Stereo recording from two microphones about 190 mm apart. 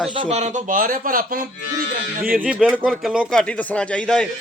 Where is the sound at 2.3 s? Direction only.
5° right (ahead or behind).